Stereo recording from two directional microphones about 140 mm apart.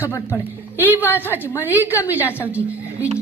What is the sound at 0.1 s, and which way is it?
Speech, 20° left (ahead or behind).